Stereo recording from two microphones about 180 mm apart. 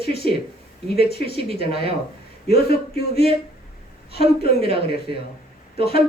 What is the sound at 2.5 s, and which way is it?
Speech, 60° left (ahead or behind).